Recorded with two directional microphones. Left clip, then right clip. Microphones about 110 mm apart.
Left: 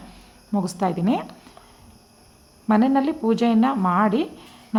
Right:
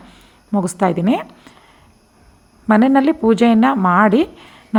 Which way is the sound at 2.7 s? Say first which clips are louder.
Right 7 dB; 50° right (ahead or behind).